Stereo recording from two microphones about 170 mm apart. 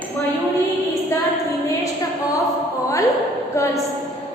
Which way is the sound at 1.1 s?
15° left (ahead or behind).